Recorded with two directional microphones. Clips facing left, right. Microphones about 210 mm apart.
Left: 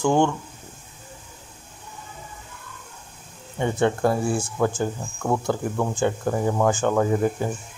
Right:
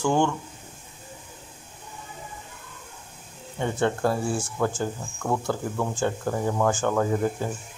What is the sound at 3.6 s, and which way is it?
Speech, 15° left (ahead or behind).